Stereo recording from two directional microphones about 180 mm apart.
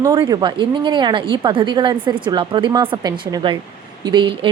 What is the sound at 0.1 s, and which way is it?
A woman's voice, 25° right (ahead or behind).